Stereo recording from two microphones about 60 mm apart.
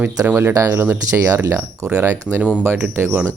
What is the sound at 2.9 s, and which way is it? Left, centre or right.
Speech, right.